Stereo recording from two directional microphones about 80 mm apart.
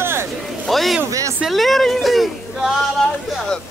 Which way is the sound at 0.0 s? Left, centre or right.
Right.